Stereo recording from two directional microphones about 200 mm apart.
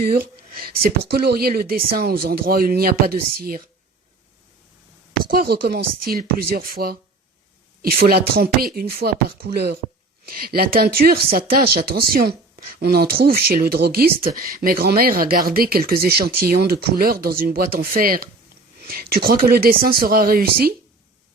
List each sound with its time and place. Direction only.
0.2 s speech: 50° right (ahead or behind)
5.2 s speech: 50° right (ahead or behind)